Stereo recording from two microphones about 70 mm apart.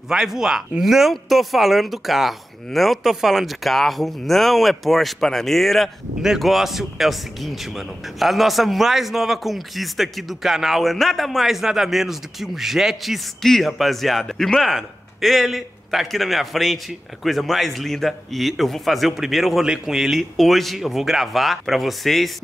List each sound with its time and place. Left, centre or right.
0.1 s speech: centre